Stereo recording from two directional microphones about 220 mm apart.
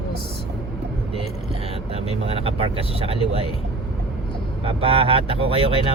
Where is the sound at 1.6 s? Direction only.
25° right (ahead or behind).